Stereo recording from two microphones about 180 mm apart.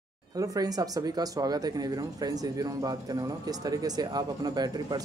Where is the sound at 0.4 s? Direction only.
20° right (ahead or behind).